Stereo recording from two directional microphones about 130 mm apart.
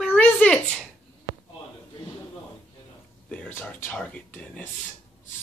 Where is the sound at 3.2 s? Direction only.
15° left (ahead or behind).